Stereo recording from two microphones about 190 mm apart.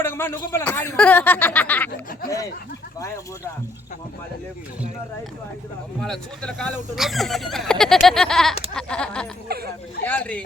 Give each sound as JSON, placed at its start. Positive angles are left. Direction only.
{"t": 0.0, "sound": "speech", "side_deg": 10}
{"t": 6.0, "sound": "speech", "side_deg": 0}
{"t": 8.7, "sound": "a sound", "side_deg": 5}
{"t": 9.5, "sound": "speech", "side_deg": -55}
{"t": 10.0, "sound": "speech", "side_deg": 5}